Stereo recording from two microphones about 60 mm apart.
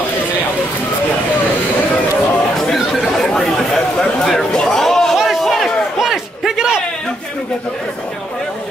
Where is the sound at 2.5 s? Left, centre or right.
Centre.